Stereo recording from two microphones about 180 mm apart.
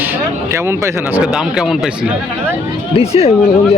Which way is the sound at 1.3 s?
5° right (ahead or behind).